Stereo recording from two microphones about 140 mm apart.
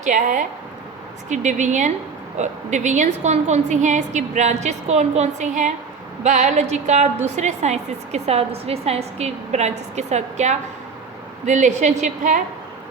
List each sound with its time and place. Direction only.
0.0 s a woman's voice: 70° right (ahead or behind)